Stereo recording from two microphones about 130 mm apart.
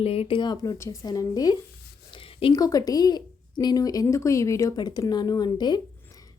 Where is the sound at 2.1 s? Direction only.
45° left (ahead or behind).